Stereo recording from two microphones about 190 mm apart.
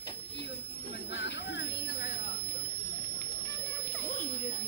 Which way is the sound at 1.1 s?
65° left (ahead or behind).